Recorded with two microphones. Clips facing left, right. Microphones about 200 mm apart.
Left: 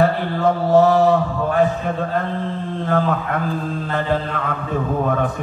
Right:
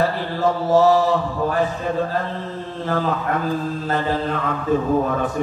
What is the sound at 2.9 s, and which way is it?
Speech, 55° left (ahead or behind).